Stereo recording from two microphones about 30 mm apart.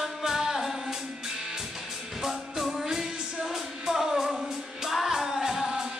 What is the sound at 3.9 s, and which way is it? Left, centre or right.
Music, centre.